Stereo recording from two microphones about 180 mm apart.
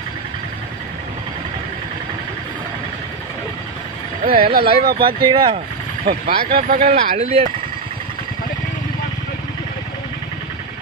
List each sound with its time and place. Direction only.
4.2 s speech: 55° right (ahead or behind)
5.0 s speech: 25° right (ahead or behind)
6.0 s speech: 55° right (ahead or behind)
6.9 s speech: 35° right (ahead or behind)